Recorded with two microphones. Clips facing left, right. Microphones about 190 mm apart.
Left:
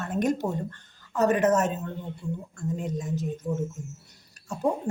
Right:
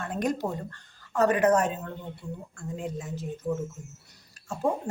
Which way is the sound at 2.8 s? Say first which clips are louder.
Left 4 dB; 45° left (ahead or behind).